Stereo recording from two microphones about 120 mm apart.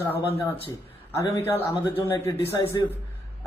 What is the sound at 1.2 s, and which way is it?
A man's voice, 20° left (ahead or behind).